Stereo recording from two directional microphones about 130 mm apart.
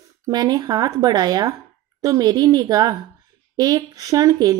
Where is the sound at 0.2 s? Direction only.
30° right (ahead or behind).